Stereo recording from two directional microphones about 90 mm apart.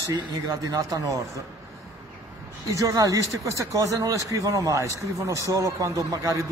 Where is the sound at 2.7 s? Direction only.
40° right (ahead or behind).